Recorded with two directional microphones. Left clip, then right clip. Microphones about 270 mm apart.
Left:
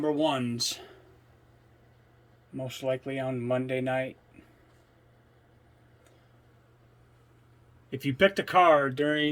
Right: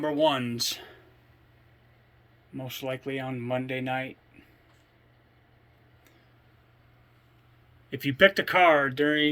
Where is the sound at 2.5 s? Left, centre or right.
Centre.